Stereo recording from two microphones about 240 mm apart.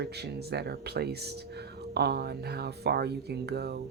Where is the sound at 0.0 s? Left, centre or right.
Right.